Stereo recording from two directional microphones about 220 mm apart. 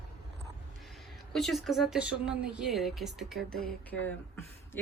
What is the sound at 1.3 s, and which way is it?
Speech, centre (ahead or behind).